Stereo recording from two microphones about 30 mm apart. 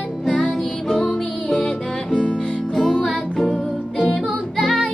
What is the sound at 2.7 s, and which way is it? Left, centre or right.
Music, left.